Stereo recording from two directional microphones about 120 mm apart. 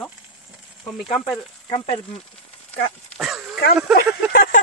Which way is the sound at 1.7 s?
50° left (ahead or behind).